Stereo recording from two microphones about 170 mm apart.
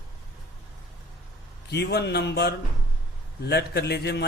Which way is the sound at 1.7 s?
75° left (ahead or behind).